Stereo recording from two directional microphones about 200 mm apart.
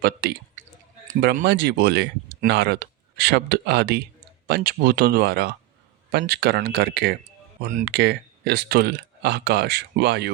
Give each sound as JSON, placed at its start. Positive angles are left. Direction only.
{"t": 0.0, "sound": "speech", "side_deg": -50}
{"t": 7.6, "sound": "speech", "side_deg": -40}
{"t": 7.9, "sound": "speech", "side_deg": -55}